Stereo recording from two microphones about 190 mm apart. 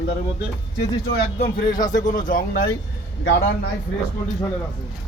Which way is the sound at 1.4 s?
45° left (ahead or behind).